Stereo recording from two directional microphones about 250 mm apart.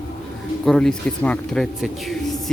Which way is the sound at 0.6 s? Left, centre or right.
Centre.